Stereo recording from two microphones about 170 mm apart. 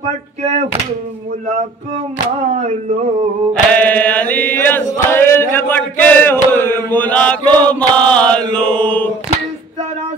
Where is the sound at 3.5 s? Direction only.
5° left (ahead or behind).